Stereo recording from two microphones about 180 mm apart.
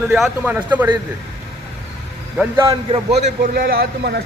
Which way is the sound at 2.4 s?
15° right (ahead or behind).